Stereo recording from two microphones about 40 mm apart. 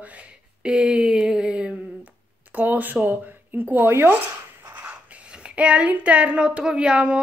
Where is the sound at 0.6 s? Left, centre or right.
Centre.